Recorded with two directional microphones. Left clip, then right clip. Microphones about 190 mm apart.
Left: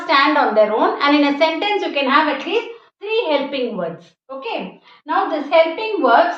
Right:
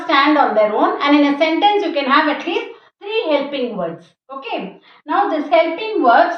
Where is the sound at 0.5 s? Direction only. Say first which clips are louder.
Even; 20° left (ahead or behind).